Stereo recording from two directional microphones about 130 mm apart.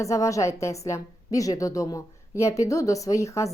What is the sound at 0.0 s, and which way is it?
A woman's voice, 25° left (ahead or behind).